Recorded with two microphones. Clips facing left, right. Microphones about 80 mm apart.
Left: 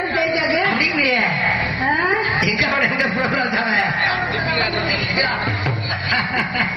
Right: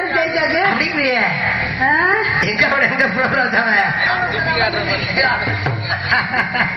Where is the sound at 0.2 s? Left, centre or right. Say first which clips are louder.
Right 2 dB; right.